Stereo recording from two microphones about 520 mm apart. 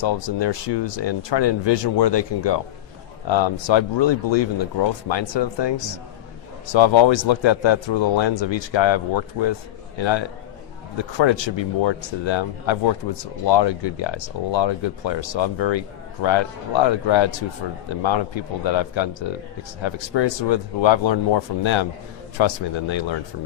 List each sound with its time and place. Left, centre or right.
0.0 s speech: left